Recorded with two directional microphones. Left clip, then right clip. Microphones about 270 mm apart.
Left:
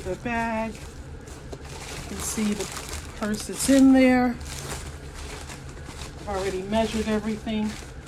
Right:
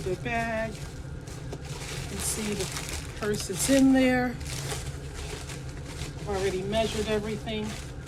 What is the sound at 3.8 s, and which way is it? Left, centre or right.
Speech, left.